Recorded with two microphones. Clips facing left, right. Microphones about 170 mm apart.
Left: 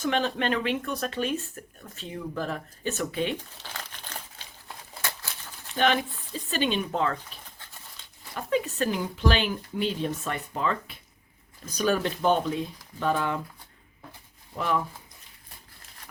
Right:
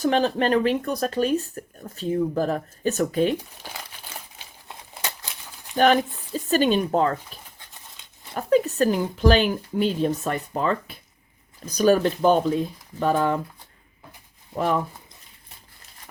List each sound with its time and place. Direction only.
0.0 s speech: 35° right (ahead or behind)
3.6 s crumpling: 10° right (ahead or behind)
5.7 s speech: 45° right (ahead or behind)
8.4 s speech: 40° right (ahead or behind)
14.5 s speech: 40° right (ahead or behind)